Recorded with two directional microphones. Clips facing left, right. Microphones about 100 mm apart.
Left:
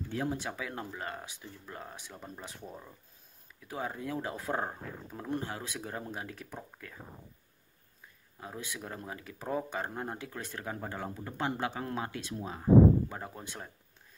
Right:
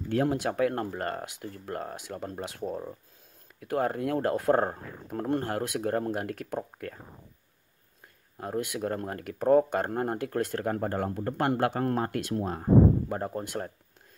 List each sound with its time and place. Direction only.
0.1 s speech: 65° right (ahead or behind)
2.4 s speech: 75° right (ahead or behind)
3.5 s speech: 60° right (ahead or behind)
4.6 s speech: 45° right (ahead or behind)
5.3 s speech: 60° right (ahead or behind)
8.4 s speech: 60° right (ahead or behind)